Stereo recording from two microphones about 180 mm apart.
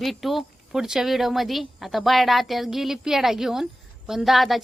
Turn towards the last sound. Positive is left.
turn(degrees=0)  # may be behind; listen again after turning